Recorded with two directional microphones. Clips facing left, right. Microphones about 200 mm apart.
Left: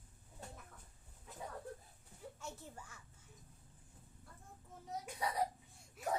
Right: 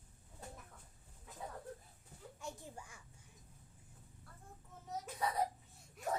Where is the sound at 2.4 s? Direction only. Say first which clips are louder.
Right 4 dB; 15° right (ahead or behind).